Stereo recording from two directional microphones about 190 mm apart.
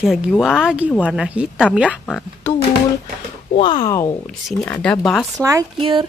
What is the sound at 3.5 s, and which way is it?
Speech, 25° left (ahead or behind).